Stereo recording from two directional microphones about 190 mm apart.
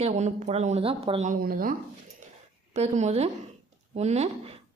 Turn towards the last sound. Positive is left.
turn(degrees=-35)  # may be behind; listen again after turning